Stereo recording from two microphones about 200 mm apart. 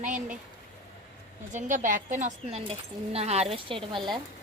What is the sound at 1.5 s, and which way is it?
Speech, 40° right (ahead or behind).